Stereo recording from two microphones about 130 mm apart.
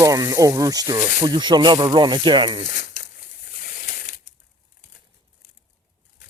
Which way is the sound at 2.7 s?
85° left.